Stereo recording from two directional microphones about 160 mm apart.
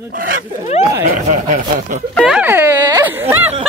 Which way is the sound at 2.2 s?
5° right (ahead or behind).